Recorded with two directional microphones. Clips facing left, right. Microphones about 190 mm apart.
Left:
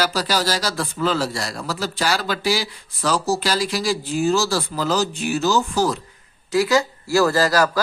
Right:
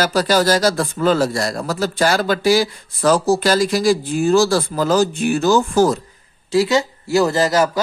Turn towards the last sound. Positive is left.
turn(degrees=-20)  # may be behind; listen again after turning